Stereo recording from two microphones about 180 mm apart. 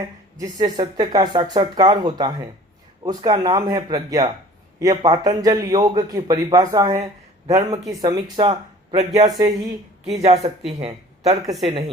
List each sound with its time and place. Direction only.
0.3 s a man's voice: 20° right (ahead or behind)
7.4 s speech: 35° right (ahead or behind)
7.7 s a man's voice: 20° right (ahead or behind)
10.2 s speech: 35° right (ahead or behind)